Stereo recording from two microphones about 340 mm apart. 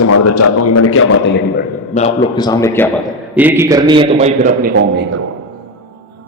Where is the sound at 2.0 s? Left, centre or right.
Centre.